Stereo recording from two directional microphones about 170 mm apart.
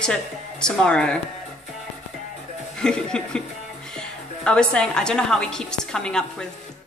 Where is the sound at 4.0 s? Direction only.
5° left (ahead or behind).